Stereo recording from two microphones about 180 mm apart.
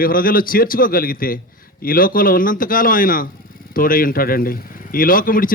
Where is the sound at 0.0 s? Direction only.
50° left (ahead or behind).